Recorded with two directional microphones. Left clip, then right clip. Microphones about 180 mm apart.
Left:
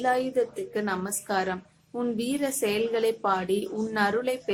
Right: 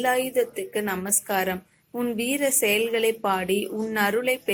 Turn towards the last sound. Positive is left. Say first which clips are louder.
# right 3 dB
turn(degrees=-10)  # may be behind; listen again after turning